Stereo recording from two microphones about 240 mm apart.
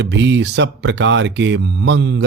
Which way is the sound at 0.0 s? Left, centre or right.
Right.